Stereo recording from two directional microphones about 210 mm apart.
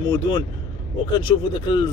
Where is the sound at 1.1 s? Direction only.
20° left (ahead or behind).